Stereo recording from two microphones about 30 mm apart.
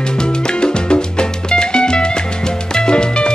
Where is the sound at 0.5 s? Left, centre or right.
Left.